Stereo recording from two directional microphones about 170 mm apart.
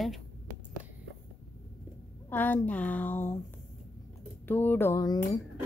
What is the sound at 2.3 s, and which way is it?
A woman's voice, 10° left (ahead or behind).